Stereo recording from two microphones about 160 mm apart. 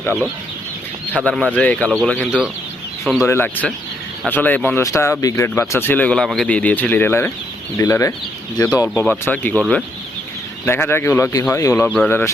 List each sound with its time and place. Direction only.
1.2 s speech: 5° left (ahead or behind)